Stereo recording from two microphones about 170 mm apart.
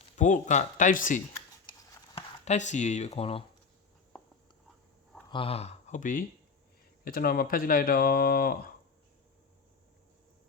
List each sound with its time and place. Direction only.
0.2 s speech: 45° left (ahead or behind)
5.3 s speech: 35° left (ahead or behind); by 6.2 s 50° left (ahead or behind)
7.0 s speech: 60° left (ahead or behind)